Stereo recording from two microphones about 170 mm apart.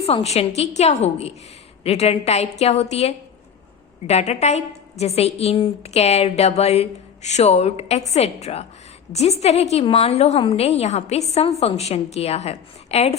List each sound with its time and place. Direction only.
0.0 s a woman's voice: 35° left (ahead or behind)